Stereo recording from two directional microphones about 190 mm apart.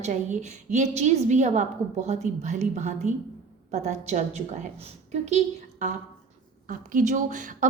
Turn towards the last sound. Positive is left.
turn(degrees=-45)  # may be behind; listen again after turning